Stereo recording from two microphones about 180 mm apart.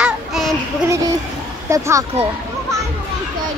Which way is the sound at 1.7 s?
20° right (ahead or behind).